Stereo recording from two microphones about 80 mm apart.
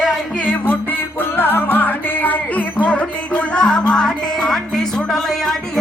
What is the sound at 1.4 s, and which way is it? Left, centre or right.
Music, left.